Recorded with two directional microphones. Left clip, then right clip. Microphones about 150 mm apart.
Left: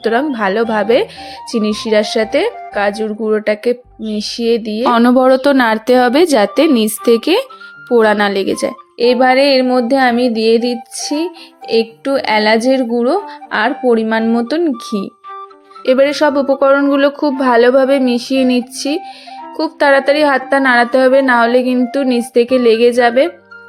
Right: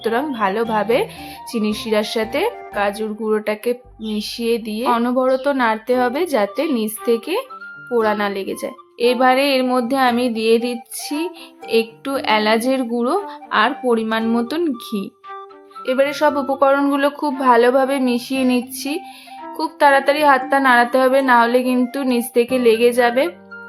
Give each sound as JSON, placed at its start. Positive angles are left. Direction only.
{"t": 0.0, "sound": "speech", "side_deg": 25}
{"t": 4.9, "sound": "a woman's voice", "side_deg": 45}